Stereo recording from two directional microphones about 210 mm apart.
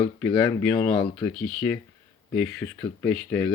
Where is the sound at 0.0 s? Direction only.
20° left (ahead or behind).